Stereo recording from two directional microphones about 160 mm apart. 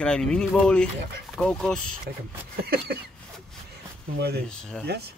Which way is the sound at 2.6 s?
80° right.